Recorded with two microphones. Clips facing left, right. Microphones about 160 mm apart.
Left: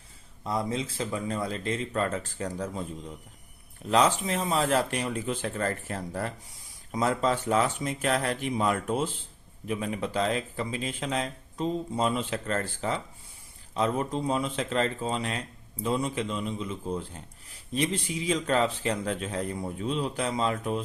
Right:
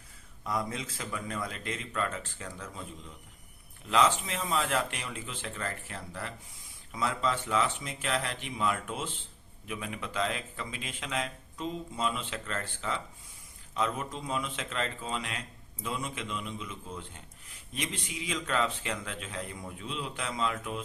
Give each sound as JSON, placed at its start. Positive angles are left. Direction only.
{"t": 0.4, "sound": "speech", "side_deg": 25}
{"t": 3.8, "sound": "speech", "side_deg": 40}